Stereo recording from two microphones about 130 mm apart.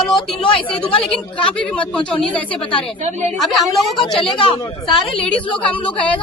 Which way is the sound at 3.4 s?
Centre (ahead or behind).